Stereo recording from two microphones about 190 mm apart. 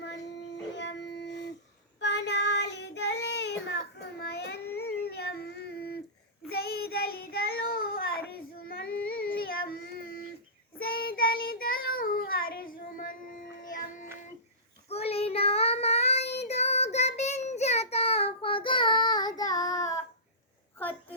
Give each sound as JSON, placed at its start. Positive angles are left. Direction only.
{"t": 0.8, "sound": "dog", "side_deg": 65}
{"t": 2.0, "sound": "child singing", "side_deg": 65}
{"t": 4.2, "sound": "a sound", "side_deg": 60}
{"t": 6.5, "sound": "child singing", "side_deg": 55}
{"t": 14.8, "sound": "child singing", "side_deg": 30}